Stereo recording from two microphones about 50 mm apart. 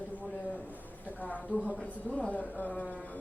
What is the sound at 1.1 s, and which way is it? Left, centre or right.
A woman's voice, left.